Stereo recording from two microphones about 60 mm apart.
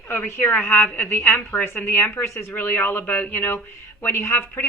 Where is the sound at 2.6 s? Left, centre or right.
Left.